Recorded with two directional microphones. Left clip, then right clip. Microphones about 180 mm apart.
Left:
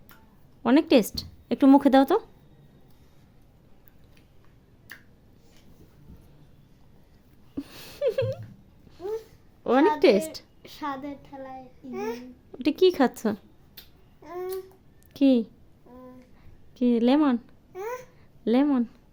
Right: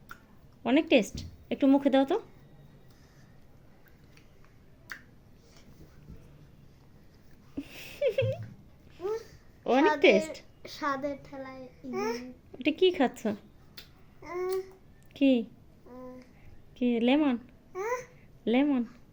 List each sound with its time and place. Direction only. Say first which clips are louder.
0.6 s speech: left 4 dB; 40° left (ahead or behind)
7.5 s a sound: left 3 dB; 30° left (ahead or behind)
9.6 s a sound: left 3 dB; 25° left (ahead or behind)
11.3 s speech: left 3 dB; 25° left (ahead or behind)
11.9 s a child's voice: even; centre (ahead or behind)
12.5 s speech: left 4 dB; 35° left (ahead or behind)
14.2 s babbling: even; centre (ahead or behind)
15.1 s a sound: left 4 dB; 30° left (ahead or behind)
16.8 s speech: left 4 dB; 30° left (ahead or behind)
17.7 s babbling: right 1 dB; centre (ahead or behind)
18.4 s speech: left 4 dB; 30° left (ahead or behind)